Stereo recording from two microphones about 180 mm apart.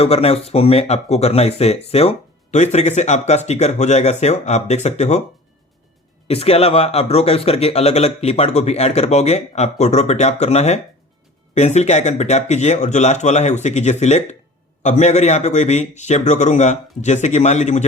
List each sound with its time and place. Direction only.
0.0 s speech: 35° left (ahead or behind)
6.2 s speech: 35° left (ahead or behind)